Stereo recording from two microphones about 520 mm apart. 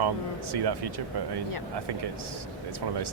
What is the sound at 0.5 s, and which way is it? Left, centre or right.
Speech, right.